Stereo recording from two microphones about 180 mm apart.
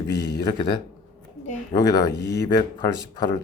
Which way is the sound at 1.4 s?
40° left (ahead or behind).